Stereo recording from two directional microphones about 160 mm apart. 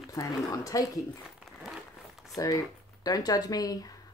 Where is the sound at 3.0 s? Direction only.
25° left (ahead or behind).